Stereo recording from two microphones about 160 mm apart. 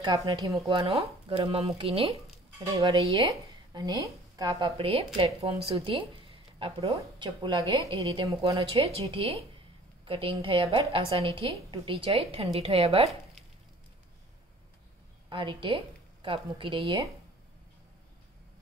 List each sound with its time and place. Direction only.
0.0 s speech: 25° right (ahead or behind)
0.7 s a woman's voice: 35° right (ahead or behind)
15.2 s a woman's voice: 30° right (ahead or behind)